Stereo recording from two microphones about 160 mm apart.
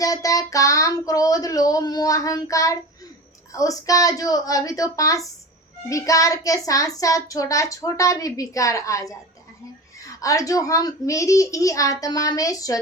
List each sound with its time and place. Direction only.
0.0 s a child's voice: 20° left (ahead or behind)
10.2 s a child's voice: 20° left (ahead or behind)